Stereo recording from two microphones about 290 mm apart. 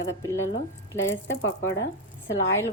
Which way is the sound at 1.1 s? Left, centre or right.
Left.